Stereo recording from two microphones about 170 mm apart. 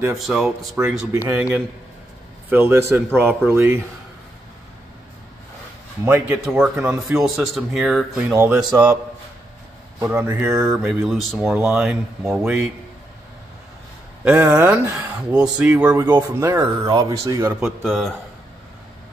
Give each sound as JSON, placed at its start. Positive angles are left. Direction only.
{"t": 0.1, "sound": "speech", "side_deg": 0}
{"t": 0.6, "sound": "speech", "side_deg": -15}
{"t": 6.0, "sound": "speech", "side_deg": -5}
{"t": 10.0, "sound": "speech", "side_deg": -15}
{"t": 14.2, "sound": "speech", "side_deg": -5}
{"t": 16.0, "sound": "speech", "side_deg": -15}
{"t": 17.6, "sound": "speech", "side_deg": 0}